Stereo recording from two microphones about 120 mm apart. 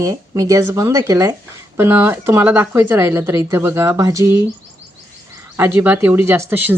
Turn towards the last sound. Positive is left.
turn(degrees=-15)  # may be behind; listen again after turning